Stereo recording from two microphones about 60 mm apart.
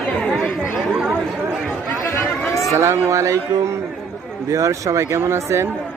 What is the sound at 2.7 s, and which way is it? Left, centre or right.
A man's voice, right.